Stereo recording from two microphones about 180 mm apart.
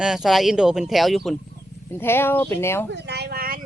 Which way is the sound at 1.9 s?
10° left (ahead or behind).